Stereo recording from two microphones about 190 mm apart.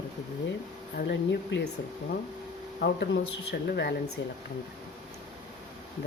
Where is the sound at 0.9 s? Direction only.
65° left (ahead or behind).